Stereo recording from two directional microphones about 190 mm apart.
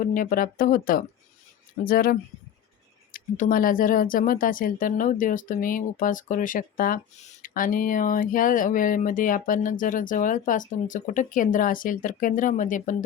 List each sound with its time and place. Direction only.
0.0 s speech: 45° left (ahead or behind)